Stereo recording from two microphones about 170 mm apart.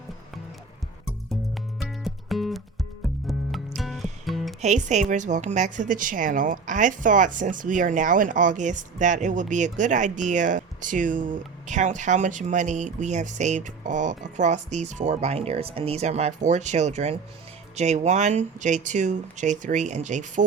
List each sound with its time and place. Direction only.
1.8 s music: centre (ahead or behind)
4.6 s a woman's voice: 45° right (ahead or behind)